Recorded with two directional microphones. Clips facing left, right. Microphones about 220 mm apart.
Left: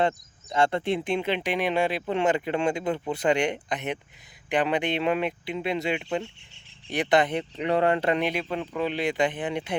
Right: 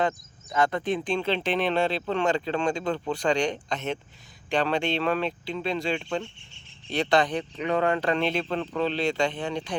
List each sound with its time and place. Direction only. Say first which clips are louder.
0.5 s speech: left 1 dB; 25° left (ahead or behind)